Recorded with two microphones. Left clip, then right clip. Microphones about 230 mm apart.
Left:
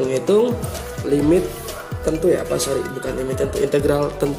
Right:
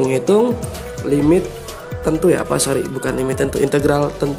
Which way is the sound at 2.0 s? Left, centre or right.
Right.